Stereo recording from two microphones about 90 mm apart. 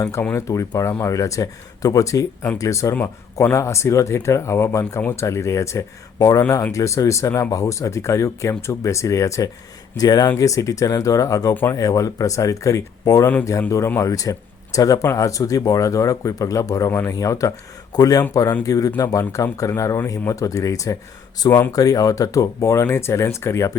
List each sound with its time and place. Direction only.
0.0 s speech: 35° left (ahead or behind)